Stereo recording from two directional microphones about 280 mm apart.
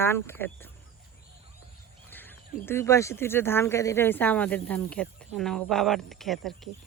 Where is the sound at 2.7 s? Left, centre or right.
Centre.